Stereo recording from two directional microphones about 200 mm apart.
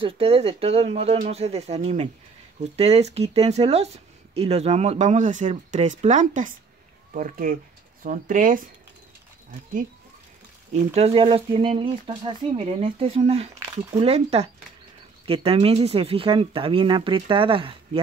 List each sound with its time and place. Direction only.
0.0 s speech: 30° right (ahead or behind)
10.7 s speech: 30° right (ahead or behind)